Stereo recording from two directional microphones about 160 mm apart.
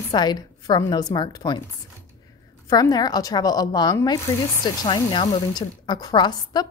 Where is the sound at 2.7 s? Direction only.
25° left (ahead or behind).